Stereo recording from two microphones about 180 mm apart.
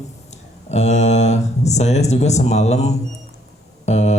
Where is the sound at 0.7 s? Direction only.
40° left (ahead or behind).